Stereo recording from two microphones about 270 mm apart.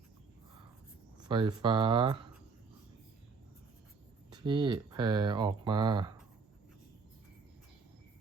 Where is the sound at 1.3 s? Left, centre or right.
Centre.